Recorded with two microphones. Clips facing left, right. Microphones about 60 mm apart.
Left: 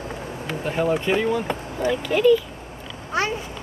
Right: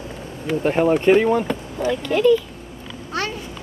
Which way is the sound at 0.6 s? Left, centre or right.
Right.